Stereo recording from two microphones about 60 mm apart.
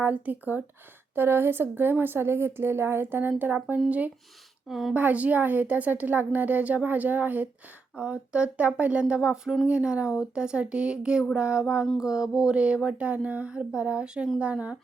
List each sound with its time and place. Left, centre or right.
0.0 s a woman's voice: right
4.7 s a woman's voice: centre
4.9 s a woman's voice: right
7.9 s a woman's voice: centre